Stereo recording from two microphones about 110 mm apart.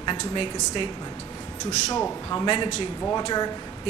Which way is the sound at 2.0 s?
30° left (ahead or behind).